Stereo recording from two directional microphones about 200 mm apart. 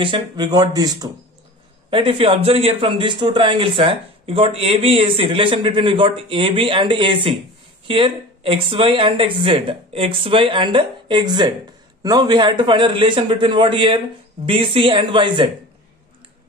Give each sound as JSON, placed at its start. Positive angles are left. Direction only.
{"t": 0.0, "sound": "a man's voice", "side_deg": -25}